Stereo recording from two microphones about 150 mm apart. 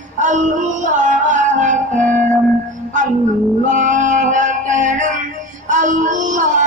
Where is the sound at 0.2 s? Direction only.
55° right (ahead or behind).